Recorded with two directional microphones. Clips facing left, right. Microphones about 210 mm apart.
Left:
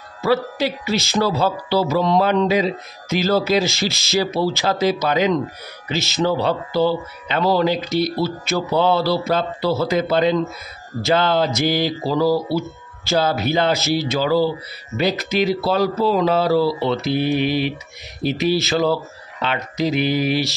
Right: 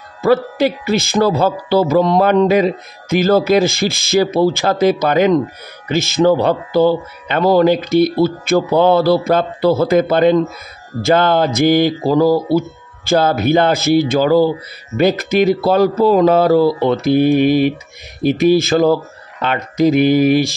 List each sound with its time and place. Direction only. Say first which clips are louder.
0.2 s speech: right 6 dB; 50° right (ahead or behind)